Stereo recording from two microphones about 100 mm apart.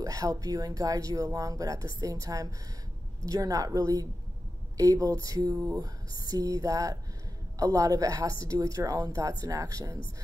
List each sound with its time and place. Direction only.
0.0 s speech: 35° right (ahead or behind)